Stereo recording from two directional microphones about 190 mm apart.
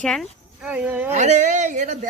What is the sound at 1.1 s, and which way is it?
Speech, 40° right (ahead or behind).